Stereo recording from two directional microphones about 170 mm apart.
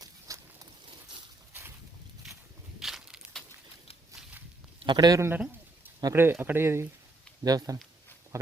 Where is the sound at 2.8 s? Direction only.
Centre (ahead or behind).